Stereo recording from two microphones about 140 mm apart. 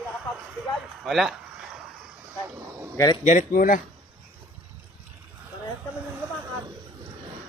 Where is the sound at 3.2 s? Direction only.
65° left (ahead or behind); by 3.8 s 80° left.